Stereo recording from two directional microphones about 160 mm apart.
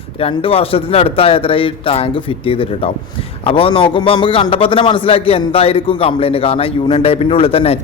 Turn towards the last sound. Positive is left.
turn(degrees=35)  # may be behind; listen again after turning